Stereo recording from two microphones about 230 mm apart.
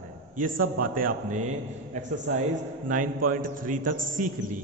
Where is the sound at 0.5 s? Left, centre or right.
Right.